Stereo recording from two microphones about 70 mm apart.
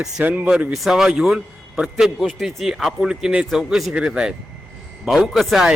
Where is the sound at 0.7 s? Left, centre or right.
Centre.